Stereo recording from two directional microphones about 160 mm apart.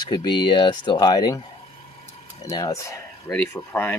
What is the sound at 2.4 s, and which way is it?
Speech, 20° left (ahead or behind).